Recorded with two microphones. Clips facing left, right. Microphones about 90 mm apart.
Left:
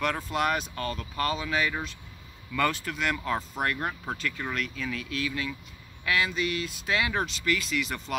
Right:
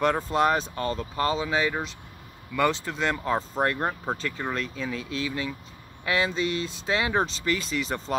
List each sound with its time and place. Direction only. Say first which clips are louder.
0.0 s speech: right 5 dB; 30° right (ahead or behind)